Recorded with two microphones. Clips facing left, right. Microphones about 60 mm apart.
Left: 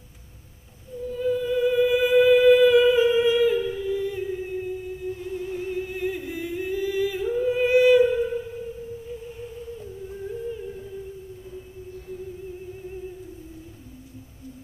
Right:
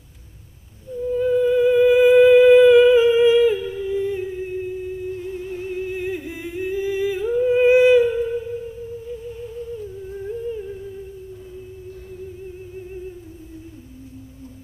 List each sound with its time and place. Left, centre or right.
1.1 s music: right
5.3 s humming: centre